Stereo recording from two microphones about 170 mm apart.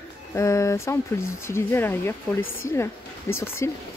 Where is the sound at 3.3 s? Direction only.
15° left (ahead or behind).